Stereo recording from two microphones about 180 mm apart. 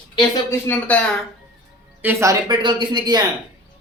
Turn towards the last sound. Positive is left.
turn(degrees=-25)  # may be behind; listen again after turning